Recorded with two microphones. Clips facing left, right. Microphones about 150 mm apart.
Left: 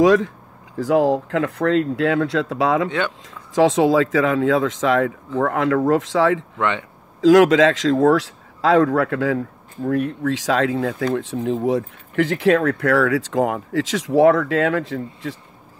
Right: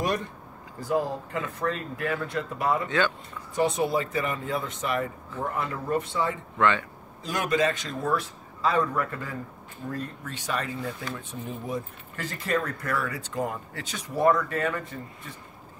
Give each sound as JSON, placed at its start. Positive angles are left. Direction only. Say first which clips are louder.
{"t": 0.0, "sound": "speech", "louder": "left 14 dB", "side_deg": 90}
{"t": 6.6, "sound": "speech", "louder": "right 3 dB", "side_deg": 20}
{"t": 7.2, "sound": "speech", "louder": "left 14 dB", "side_deg": 90}
{"t": 9.8, "sound": "speech", "louder": "left 14 dB", "side_deg": 70}